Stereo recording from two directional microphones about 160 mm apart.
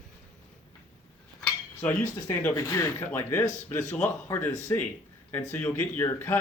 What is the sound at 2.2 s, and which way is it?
Speech, 15° left (ahead or behind).